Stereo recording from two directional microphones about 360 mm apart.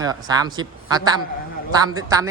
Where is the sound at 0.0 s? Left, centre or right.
Centre.